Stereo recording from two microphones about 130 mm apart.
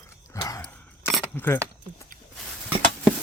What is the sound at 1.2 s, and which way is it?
Speech, 15° left (ahead or behind).